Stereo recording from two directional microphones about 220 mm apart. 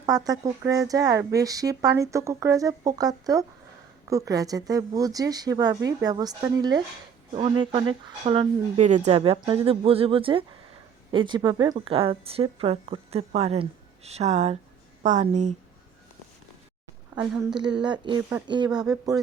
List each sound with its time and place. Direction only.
0.0 s a woman's voice: 15° right (ahead or behind); by 15.5 s 30° right (ahead or behind)
17.2 s a woman's voice: 5° right (ahead or behind)
17.6 s a woman's voice: 20° right (ahead or behind)
18.2 s speech: 10° right (ahead or behind)
18.4 s a woman's voice: 20° right (ahead or behind)